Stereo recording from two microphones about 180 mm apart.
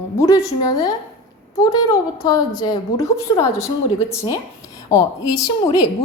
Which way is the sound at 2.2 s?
25° left (ahead or behind).